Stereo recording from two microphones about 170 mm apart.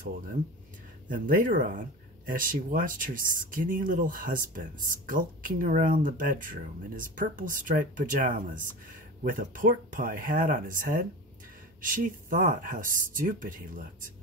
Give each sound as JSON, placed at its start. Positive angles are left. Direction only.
{"t": 1.0, "sound": "speech", "side_deg": -50}